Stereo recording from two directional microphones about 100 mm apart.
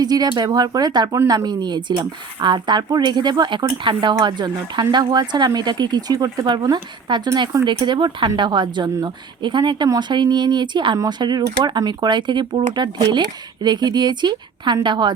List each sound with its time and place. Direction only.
0.0 s speech: 40° right (ahead or behind)